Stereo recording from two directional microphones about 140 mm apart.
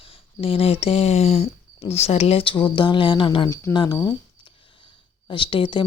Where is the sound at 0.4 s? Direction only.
40° left (ahead or behind).